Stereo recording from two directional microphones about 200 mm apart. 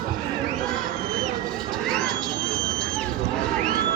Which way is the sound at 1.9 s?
5° left (ahead or behind).